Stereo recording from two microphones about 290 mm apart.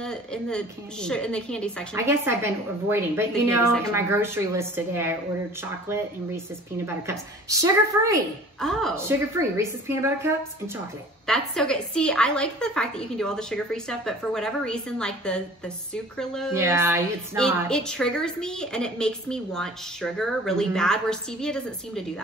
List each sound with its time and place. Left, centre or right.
0.0 s a woman's voice: centre
2.0 s a woman's voice: centre
8.5 s a woman's voice: centre
8.9 s a woman's voice: centre
11.2 s a woman's voice: centre
16.5 s a woman's voice: centre
17.6 s a woman's voice: centre